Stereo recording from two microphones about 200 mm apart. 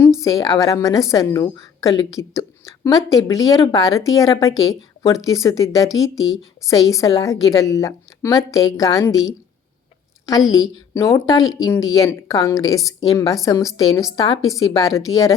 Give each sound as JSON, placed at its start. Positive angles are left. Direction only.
{"t": 0.2, "sound": "a woman's voice", "side_deg": 15}
{"t": 6.2, "sound": "a woman's voice", "side_deg": 0}
{"t": 6.7, "sound": "a woman's voice", "side_deg": 15}
{"t": 10.4, "sound": "speech", "side_deg": 0}
{"t": 10.9, "sound": "a woman's voice", "side_deg": 15}